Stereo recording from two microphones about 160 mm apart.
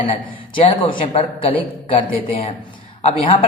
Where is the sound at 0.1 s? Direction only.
35° left (ahead or behind).